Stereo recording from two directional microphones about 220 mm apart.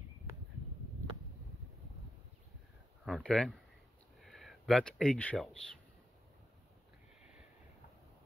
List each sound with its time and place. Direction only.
3.1 s speech: centre (ahead or behind)